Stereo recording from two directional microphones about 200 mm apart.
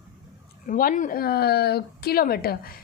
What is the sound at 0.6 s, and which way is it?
Speech, 40° left (ahead or behind).